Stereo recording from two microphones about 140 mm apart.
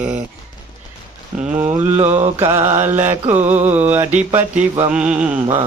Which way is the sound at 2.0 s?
55° right (ahead or behind).